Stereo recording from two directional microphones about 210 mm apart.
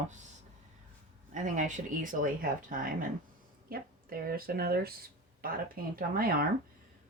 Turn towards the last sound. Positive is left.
turn(degrees=-45)  # may be behind; listen again after turning